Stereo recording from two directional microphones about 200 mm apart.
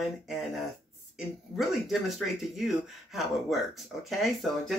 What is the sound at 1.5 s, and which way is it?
Speech, centre (ahead or behind).